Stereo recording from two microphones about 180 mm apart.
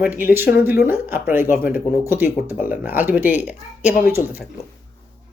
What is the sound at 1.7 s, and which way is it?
Speech, 50° left (ahead or behind).